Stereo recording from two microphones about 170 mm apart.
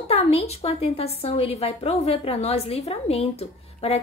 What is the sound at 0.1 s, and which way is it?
A woman's voice, 35° left (ahead or behind).